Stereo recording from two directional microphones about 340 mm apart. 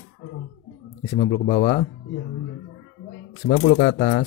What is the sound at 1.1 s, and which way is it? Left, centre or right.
Speech, left.